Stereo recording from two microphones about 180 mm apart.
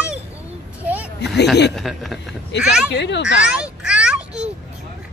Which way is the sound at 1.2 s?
70° left (ahead or behind).